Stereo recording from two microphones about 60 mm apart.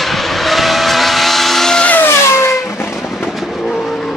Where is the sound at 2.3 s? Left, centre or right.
Left.